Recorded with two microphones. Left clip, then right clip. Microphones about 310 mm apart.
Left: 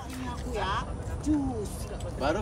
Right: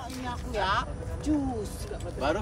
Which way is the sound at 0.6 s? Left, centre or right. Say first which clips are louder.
Right 4 dB; centre.